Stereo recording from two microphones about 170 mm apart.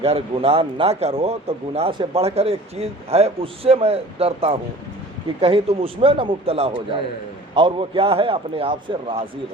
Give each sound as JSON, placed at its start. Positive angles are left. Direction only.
{"t": 0.0, "sound": "speech", "side_deg": -35}